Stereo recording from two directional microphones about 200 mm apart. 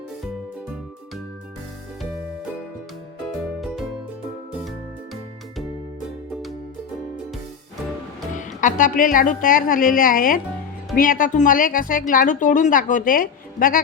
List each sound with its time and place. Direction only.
3.6 s music: centre (ahead or behind)
8.4 s a woman's voice: 40° left (ahead or behind)